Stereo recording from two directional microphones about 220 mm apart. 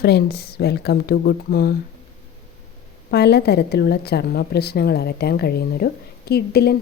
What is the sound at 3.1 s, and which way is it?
A woman's voice, 50° left (ahead or behind).